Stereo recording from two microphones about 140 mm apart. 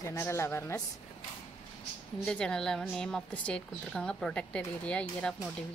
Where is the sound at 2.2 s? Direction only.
5° left (ahead or behind).